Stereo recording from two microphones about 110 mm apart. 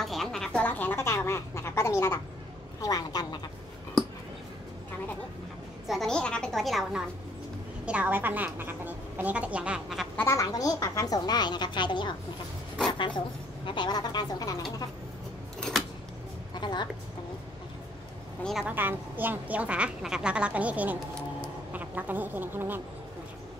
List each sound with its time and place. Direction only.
0.0 s a sound: centre (ahead or behind); by 2.1 s 25° left (ahead or behind)
2.8 s a woman's voice: 35° left (ahead or behind)
5.9 s a woman's voice: 5° left (ahead or behind)
10.1 s a woman's voice: 25° left (ahead or behind)
16.5 s a sound: 45° left (ahead or behind)
18.4 s a woman's voice: centre (ahead or behind)
18.7 s a woman's voice: 15° right (ahead or behind)